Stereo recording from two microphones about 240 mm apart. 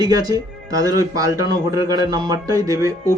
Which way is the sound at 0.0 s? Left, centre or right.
Centre.